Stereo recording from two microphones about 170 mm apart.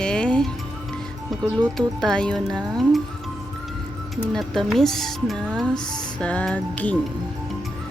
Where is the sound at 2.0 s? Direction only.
5° left (ahead or behind).